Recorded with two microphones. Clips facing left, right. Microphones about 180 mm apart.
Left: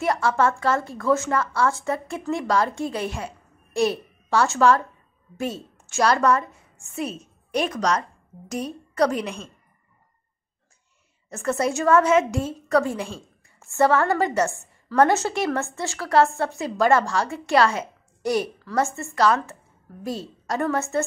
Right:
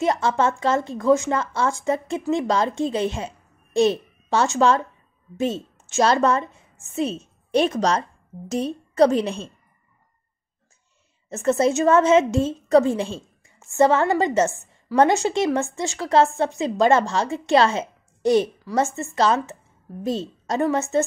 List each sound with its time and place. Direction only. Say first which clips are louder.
0.0 s a woman's voice: right 1 dB; 20° right (ahead or behind)
11.2 s a woman's voice: right 5 dB; 25° right (ahead or behind)